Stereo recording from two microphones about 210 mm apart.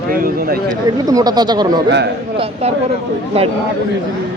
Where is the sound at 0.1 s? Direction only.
45° right (ahead or behind).